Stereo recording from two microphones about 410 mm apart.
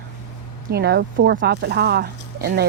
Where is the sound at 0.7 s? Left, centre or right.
Right.